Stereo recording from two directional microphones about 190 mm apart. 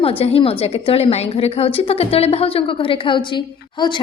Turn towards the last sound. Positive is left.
turn(degrees=25)  # may be behind; listen again after turning